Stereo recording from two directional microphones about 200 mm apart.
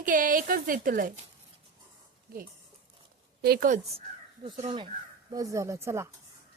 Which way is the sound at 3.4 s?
50° right (ahead or behind).